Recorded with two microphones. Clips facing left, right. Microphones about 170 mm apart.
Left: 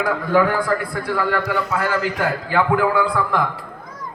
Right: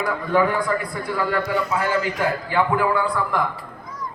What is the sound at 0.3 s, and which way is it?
A man's voice, 85° left.